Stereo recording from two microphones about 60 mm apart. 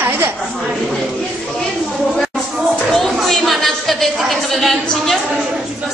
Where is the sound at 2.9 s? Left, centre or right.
Centre.